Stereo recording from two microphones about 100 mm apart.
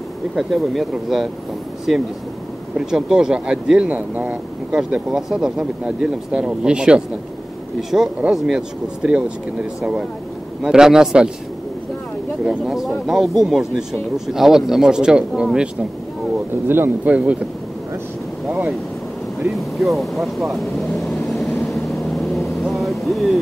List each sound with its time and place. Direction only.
0.4 s speech: centre (ahead or behind)
12.4 s speech: 5° right (ahead or behind)
16.6 s speech: 20° right (ahead or behind)
19.4 s speech: centre (ahead or behind)
21.6 s vehicle: centre (ahead or behind)